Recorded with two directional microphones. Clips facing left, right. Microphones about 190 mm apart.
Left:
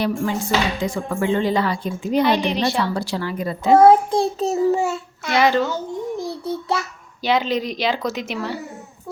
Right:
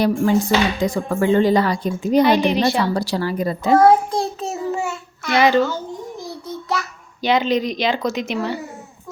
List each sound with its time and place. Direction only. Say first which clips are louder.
0.0 s music: right 5 dB; 40° right (ahead or behind)
2.2 s a woman's voice: right 3 dB; centre (ahead or behind)
2.8 s music: right 3 dB; 40° right (ahead or behind)
3.8 s a child's voice: left 2 dB; 25° left (ahead or behind)
4.4 s a child's voice: left 6 dB; 35° left (ahead or behind)
5.3 s a woman's voice: right 2 dB; centre (ahead or behind)
6.1 s child singing: left 5 dB; 30° left (ahead or behind)
7.2 s a woman's voice: right 2 dB; 5° left (ahead or behind)